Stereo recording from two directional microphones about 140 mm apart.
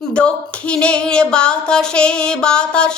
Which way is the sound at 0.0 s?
10° left (ahead or behind).